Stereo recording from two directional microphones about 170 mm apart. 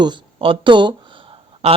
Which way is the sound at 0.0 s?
30° right (ahead or behind).